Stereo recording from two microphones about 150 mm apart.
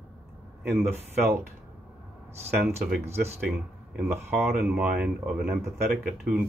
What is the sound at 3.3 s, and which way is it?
Speech, 15° right (ahead or behind).